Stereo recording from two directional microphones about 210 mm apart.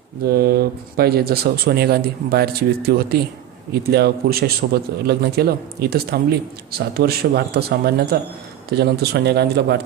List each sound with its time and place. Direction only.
0.2 s speech: 45° right (ahead or behind)